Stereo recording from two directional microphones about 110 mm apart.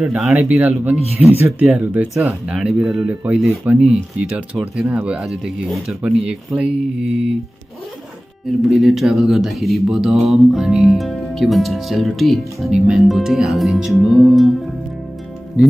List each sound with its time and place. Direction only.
0.0 s speech: 5° right (ahead or behind)
0.3 s speech: 15° right (ahead or behind)
8.6 s speech: 5° right (ahead or behind)